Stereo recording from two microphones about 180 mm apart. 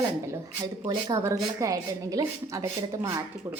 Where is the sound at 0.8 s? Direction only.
25° right (ahead or behind).